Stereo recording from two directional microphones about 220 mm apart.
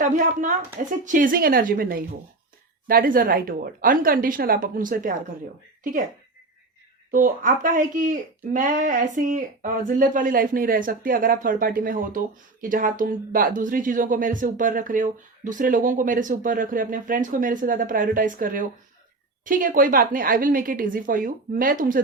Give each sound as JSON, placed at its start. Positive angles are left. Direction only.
{"t": 0.0, "sound": "speech", "side_deg": -35}
{"t": 7.1, "sound": "speech", "side_deg": -35}